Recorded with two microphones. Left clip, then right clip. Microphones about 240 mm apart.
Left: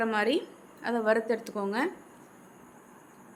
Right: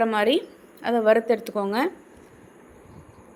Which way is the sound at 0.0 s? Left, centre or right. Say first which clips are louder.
Right 6 dB; centre.